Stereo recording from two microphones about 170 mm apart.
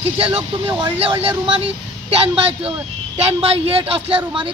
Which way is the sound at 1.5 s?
35° right (ahead or behind).